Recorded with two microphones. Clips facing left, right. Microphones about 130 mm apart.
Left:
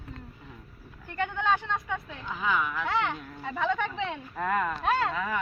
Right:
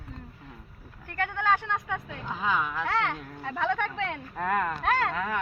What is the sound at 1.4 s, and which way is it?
Speech, 10° right (ahead or behind).